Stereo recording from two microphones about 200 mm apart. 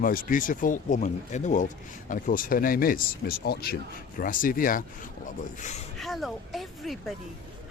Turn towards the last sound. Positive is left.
turn(degrees=0)  # may be behind; listen again after turning